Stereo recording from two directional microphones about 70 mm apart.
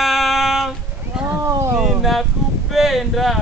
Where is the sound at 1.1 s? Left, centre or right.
Centre.